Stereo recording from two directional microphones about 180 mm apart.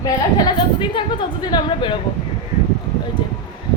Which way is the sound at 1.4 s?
25° left (ahead or behind).